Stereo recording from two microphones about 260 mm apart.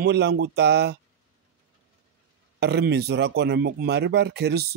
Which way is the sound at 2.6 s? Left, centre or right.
Right.